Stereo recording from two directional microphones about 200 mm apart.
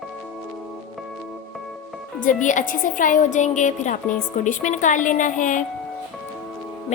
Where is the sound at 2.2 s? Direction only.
40° left (ahead or behind).